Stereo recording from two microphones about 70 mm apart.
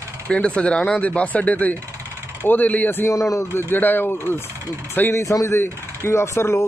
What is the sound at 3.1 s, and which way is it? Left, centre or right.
Speech, left.